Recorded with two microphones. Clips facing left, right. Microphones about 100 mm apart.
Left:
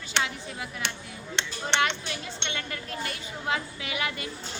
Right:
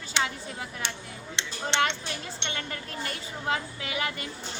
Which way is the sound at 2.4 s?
35° right (ahead or behind).